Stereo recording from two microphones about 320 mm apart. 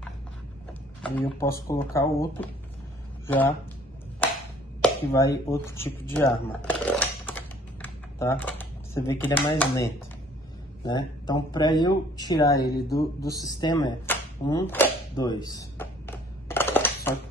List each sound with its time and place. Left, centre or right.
1.0 s speech: centre
4.8 s speech: centre
12.5 s speech: left
13.2 s a sound: centre